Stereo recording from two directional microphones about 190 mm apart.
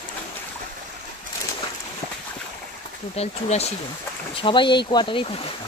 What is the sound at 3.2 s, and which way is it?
Speech, 35° left (ahead or behind).